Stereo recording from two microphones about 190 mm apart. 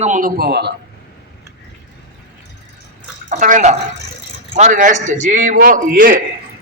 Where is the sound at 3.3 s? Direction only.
40° right (ahead or behind).